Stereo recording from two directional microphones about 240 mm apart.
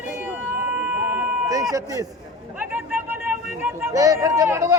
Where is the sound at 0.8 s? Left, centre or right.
Centre.